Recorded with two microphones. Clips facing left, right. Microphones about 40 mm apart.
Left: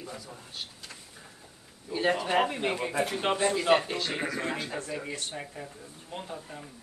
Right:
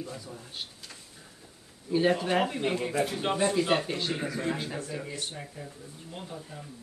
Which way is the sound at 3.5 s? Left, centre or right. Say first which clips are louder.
Left 2 dB; centre.